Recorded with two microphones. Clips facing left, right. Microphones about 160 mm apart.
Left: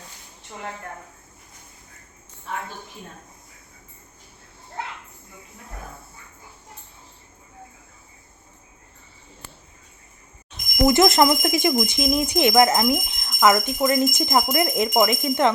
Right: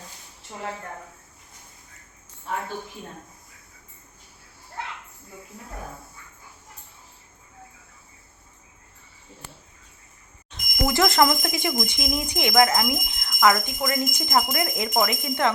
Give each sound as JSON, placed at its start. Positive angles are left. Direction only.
{"t": 10.5, "sound": "speech", "side_deg": 20}